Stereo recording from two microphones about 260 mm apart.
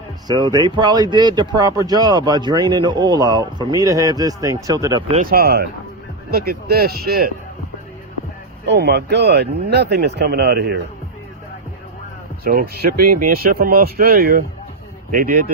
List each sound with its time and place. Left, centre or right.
0.3 s speech: centre
5.1 s speech: right
8.6 s speech: right
12.5 s speech: right